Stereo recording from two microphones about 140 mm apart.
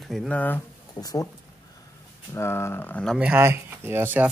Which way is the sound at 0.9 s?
25° left (ahead or behind).